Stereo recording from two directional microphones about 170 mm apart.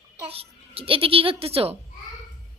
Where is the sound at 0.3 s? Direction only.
35° right (ahead or behind).